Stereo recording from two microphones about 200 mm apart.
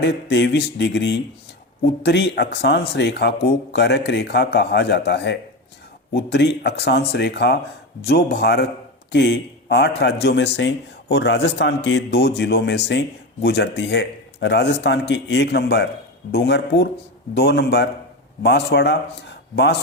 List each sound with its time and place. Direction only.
0.0 s speech: 55° left (ahead or behind)